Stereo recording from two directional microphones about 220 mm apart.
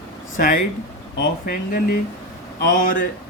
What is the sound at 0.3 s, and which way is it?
A man's voice, 40° left (ahead or behind).